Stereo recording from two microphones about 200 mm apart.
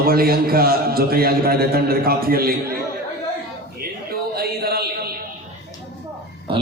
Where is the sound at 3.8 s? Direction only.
50° right (ahead or behind).